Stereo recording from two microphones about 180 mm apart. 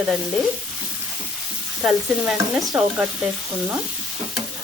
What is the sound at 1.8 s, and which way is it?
Stir, 5° right (ahead or behind).